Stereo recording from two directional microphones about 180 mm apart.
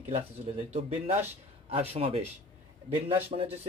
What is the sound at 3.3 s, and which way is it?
Speech, 40° right (ahead or behind).